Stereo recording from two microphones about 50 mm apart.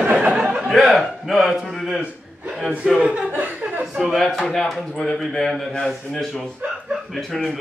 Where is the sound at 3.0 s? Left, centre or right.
Centre.